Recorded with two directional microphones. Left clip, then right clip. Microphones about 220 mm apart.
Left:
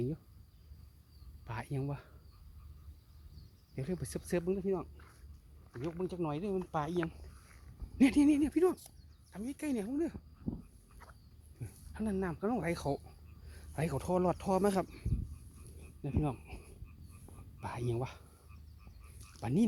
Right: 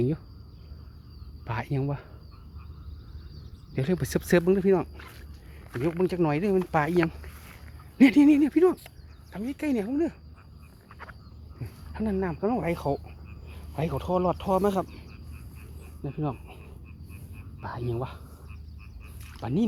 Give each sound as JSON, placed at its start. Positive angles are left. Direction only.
{"t": 1.5, "sound": "speech", "side_deg": 0}
{"t": 3.8, "sound": "speech", "side_deg": -10}
{"t": 11.6, "sound": "speech", "side_deg": 20}
{"t": 16.0, "sound": "speech", "side_deg": 30}
{"t": 17.6, "sound": "speech", "side_deg": 35}
{"t": 19.4, "sound": "speech", "side_deg": 30}